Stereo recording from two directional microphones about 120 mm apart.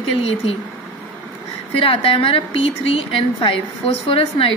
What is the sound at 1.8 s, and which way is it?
A woman's voice, 50° left (ahead or behind).